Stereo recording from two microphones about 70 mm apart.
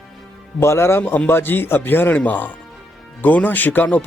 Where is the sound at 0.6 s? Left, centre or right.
Left.